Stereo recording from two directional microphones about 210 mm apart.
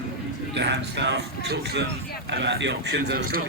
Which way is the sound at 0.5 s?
55° right (ahead or behind).